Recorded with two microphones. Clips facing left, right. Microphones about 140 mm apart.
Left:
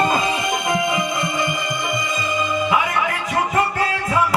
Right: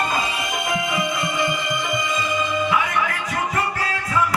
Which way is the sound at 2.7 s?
20° left (ahead or behind).